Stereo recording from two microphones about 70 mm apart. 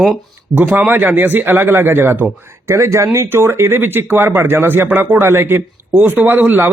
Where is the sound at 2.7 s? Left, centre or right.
Right.